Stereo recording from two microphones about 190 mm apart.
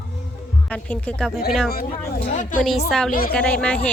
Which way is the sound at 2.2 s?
40° left (ahead or behind).